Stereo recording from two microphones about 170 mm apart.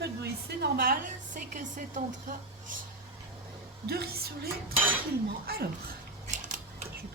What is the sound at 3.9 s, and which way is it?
A woman's voice, 65° right (ahead or behind).